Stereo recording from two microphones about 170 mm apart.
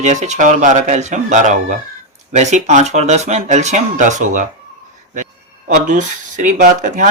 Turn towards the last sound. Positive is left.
turn(degrees=-50)  # may be behind; listen again after turning